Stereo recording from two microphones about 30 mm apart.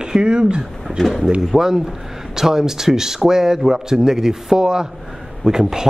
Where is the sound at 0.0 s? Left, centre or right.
Right.